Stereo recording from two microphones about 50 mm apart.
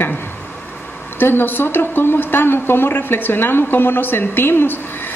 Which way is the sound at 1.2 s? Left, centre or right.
Left.